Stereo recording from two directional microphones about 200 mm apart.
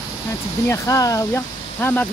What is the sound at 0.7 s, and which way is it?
Speech, 15° left (ahead or behind).